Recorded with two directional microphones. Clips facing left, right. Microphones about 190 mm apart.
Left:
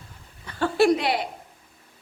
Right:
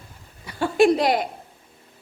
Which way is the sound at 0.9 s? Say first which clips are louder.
Right 4 dB; 45° right (ahead or behind).